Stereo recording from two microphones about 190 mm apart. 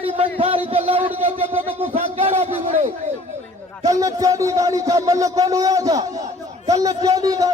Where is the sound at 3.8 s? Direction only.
20° right (ahead or behind).